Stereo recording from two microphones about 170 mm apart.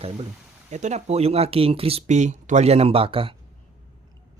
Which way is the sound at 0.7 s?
45° right (ahead or behind).